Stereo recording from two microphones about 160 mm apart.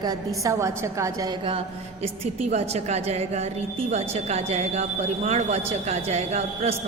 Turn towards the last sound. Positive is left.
turn(degrees=-40)  # may be behind; listen again after turning